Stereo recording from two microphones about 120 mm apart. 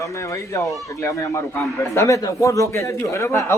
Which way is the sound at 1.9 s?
25° left (ahead or behind).